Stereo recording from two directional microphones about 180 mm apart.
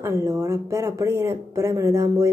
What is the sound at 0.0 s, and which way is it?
Speech, 15° right (ahead or behind).